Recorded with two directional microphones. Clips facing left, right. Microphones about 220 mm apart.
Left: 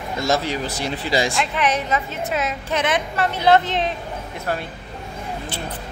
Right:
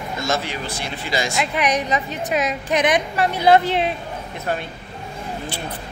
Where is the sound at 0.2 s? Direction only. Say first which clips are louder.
Left 4 dB; 40° left (ahead or behind).